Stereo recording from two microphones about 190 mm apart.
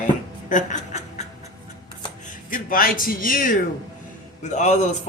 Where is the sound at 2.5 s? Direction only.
45° left (ahead or behind).